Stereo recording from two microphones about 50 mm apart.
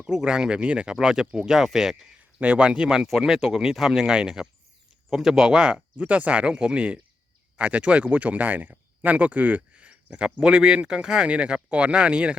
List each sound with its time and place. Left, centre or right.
0.1 s speech: centre
2.4 s speech: right
6.0 s speech: right